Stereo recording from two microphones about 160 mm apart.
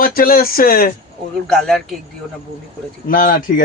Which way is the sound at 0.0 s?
65° left (ahead or behind).